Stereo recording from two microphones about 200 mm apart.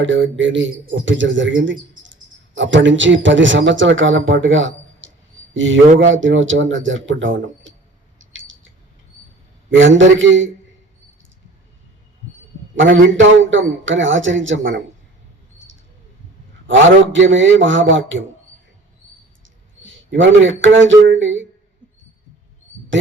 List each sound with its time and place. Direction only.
0.0 s a man's voice: 70° right (ahead or behind)
8.2 s a sound: 75° right (ahead or behind)
9.6 s a man's voice: 70° right (ahead or behind)
13.1 s a man's voice: 70° right (ahead or behind)
16.6 s a man's voice: 70° right (ahead or behind)
19.8 s speech: 70° right (ahead or behind)